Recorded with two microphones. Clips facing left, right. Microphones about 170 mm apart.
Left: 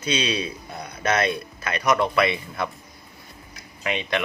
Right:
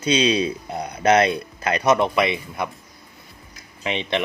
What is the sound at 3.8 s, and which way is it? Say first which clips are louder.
Speech: right 2 dB; 25° right (ahead or behind).